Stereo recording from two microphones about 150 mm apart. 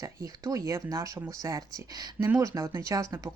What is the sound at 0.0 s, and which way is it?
Speech, 25° right (ahead or behind).